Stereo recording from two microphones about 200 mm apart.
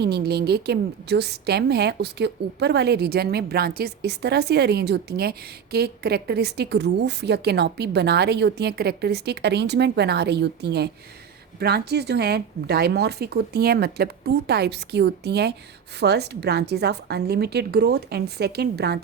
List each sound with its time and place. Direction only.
0.0 s a woman's voice: 55° right (ahead or behind)